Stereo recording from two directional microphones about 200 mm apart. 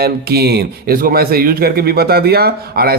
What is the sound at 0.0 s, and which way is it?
Speech, 50° right (ahead or behind).